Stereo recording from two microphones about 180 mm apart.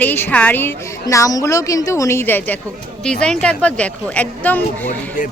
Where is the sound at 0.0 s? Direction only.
10° left (ahead or behind).